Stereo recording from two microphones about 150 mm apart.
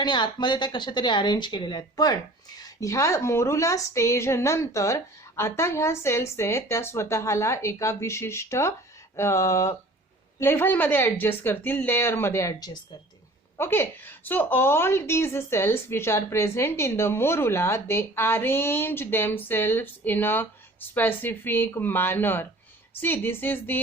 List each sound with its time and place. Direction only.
0.0 s a woman's voice: 30° left (ahead or behind); by 23.8 s 15° left (ahead or behind)